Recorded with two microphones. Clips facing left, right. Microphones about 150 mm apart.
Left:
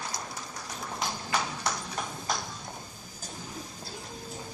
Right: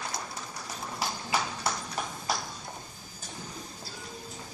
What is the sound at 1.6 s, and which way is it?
Clip-clop, 5° right (ahead or behind).